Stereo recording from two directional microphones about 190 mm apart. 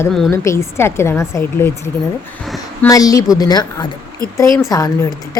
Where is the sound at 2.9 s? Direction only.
20° left (ahead or behind).